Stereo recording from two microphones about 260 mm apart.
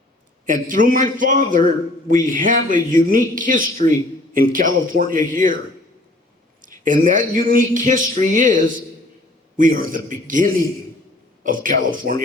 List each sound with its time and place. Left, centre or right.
0.4 s speech: right
6.6 s a sound: right
9.6 s speech: right